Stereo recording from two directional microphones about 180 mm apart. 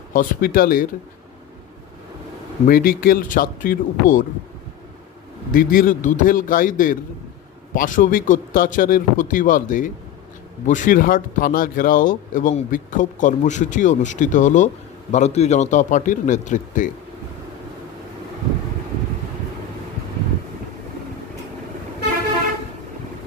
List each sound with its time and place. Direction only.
0.1 s speech: 50° left (ahead or behind)
2.6 s speech: 55° left (ahead or behind)
5.5 s speech: 50° left (ahead or behind)